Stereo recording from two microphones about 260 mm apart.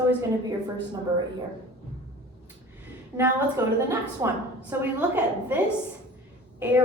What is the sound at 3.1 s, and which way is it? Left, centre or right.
A woman's voice, centre.